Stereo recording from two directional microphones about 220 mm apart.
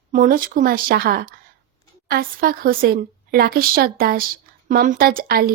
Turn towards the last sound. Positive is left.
turn(degrees=-45)  # may be behind; listen again after turning